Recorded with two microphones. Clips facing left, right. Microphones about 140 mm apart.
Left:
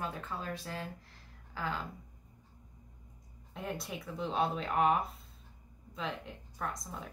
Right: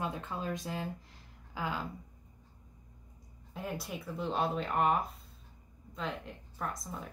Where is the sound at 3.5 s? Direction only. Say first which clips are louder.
Right 1 dB; centre (ahead or behind).